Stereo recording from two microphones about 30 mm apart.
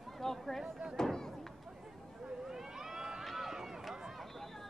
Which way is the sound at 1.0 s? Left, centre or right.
Left.